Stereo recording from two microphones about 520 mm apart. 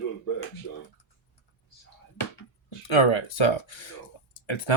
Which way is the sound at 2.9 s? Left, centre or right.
Left.